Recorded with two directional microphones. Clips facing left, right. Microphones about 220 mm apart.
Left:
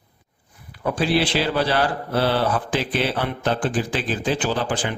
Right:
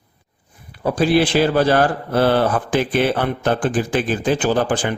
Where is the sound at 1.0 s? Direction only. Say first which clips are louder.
Right 6 dB; 50° right (ahead or behind).